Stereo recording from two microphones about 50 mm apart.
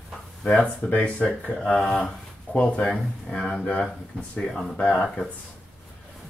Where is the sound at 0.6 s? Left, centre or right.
Left.